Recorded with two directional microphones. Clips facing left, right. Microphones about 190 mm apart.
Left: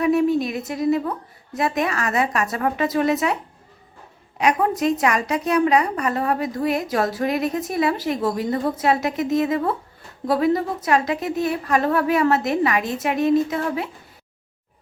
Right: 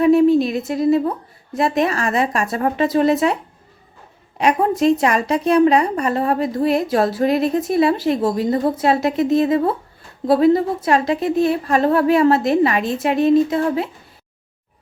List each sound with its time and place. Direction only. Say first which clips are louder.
0.0 s a woman's voice: right 6 dB; 30° right (ahead or behind)
4.4 s a woman's voice: right 3 dB; 30° right (ahead or behind)